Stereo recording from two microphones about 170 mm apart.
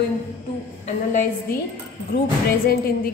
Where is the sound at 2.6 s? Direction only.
60° left (ahead or behind).